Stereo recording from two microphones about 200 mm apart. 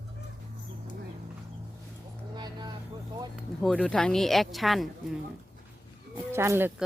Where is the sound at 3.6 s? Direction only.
5° left (ahead or behind).